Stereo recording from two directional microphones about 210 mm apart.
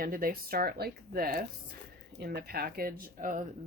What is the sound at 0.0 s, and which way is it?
Speech, 45° right (ahead or behind).